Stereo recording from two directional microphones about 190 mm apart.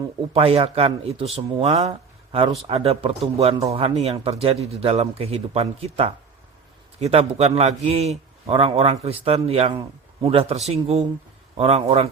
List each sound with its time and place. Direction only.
0.3 s a man's voice: 30° right (ahead or behind)